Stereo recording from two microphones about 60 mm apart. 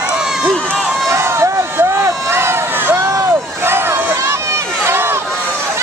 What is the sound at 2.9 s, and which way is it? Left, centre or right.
Vehicle, right.